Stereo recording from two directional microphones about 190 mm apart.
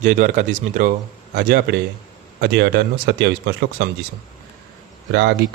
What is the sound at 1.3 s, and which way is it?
Speech, 55° right (ahead or behind).